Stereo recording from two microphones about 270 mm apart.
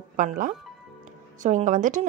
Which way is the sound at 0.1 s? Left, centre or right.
Right.